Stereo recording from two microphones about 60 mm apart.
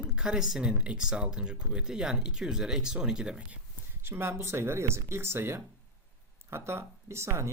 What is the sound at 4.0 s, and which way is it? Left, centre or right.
Speech, right.